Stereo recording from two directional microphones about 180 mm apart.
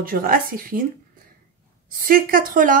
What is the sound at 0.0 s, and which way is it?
Speech, 55° right (ahead or behind).